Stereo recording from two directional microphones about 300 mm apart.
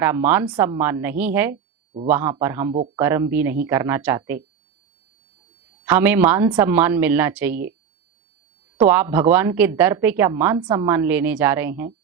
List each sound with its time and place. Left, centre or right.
0.0 s speech: centre
2.7 s speech: centre
3.0 s speech: centre
5.8 s speech: centre
8.8 s speech: centre